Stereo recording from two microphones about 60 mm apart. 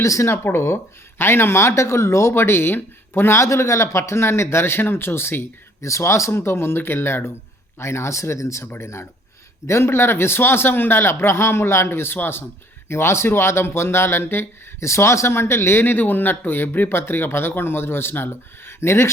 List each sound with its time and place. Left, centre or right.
0.0 s speech: left
0.3 s speech: left
5.8 s speech: left
8.6 s speech: left